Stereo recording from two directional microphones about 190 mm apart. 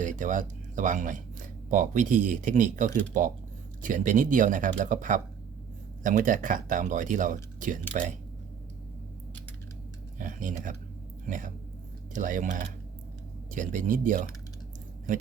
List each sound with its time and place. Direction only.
0.0 s speech: 40° right (ahead or behind)
10.2 s speech: 45° right (ahead or behind)